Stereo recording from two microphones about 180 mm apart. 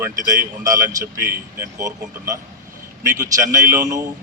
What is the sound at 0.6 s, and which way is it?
A man's voice, 20° right (ahead or behind).